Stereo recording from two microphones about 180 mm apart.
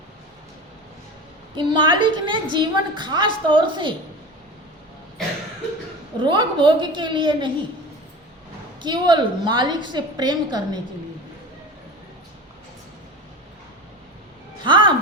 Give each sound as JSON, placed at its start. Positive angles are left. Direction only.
{"t": 1.5, "sound": "a woman's voice", "side_deg": -25}
{"t": 6.1, "sound": "a woman's voice", "side_deg": -25}
{"t": 8.8, "sound": "a woman's voice", "side_deg": -25}
{"t": 14.6, "sound": "music", "side_deg": -25}